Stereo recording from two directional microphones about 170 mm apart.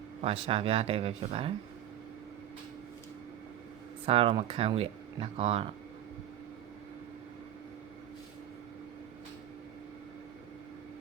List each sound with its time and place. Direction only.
0.2 s speech: 35° right (ahead or behind)
4.0 s speech: 35° right (ahead or behind)